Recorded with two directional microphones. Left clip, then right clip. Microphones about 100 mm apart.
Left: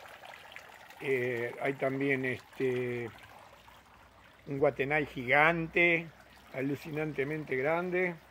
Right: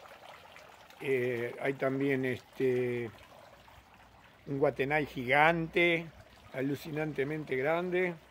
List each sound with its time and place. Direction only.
1.0 s speech: 25° right (ahead or behind)
4.5 s speech: 35° right (ahead or behind)
7.3 s speech: 20° right (ahead or behind)